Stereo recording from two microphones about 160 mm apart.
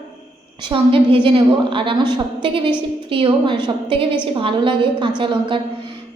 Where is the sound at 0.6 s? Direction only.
35° right (ahead or behind).